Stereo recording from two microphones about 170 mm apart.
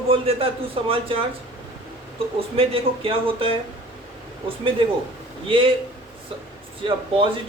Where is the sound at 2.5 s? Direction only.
30° right (ahead or behind).